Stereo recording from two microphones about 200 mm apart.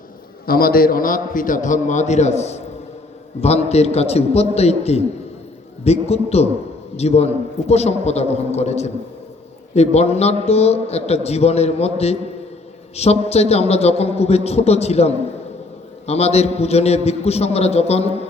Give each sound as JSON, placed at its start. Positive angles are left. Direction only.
{"t": 0.4, "sound": "a man's voice", "side_deg": 50}